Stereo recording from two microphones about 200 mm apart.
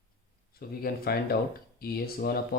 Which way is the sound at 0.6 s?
50° left (ahead or behind).